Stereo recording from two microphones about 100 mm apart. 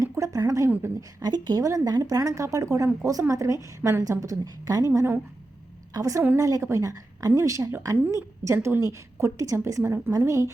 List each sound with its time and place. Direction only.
0.0 s a sound: 30° right (ahead or behind)
1.2 s a woman's voice: 45° right (ahead or behind)
4.9 s a woman's voice: 25° right (ahead or behind)
5.9 s a woman's voice: 35° right (ahead or behind)